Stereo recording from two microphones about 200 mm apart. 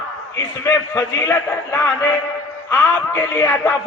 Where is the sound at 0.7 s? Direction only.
15° left (ahead or behind).